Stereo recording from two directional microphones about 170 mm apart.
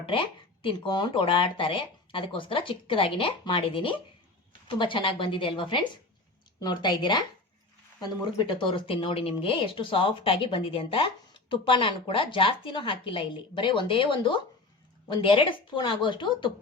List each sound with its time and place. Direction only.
0.0 s a woman's voice: 30° left (ahead or behind)